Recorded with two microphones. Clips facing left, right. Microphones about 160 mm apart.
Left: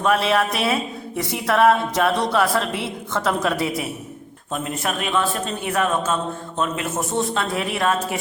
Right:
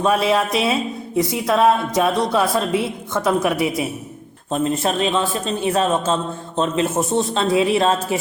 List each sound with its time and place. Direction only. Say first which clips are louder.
0.0 s speech: right 2 dB; 15° right (ahead or behind)
4.5 s a man's voice: right 6 dB; 30° right (ahead or behind)